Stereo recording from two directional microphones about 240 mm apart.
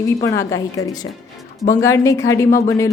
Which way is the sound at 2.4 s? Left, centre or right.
Left.